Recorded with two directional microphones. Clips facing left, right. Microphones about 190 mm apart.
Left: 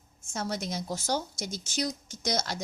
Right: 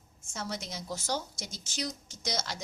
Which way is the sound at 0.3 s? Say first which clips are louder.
Left 5 dB; 50° left (ahead or behind).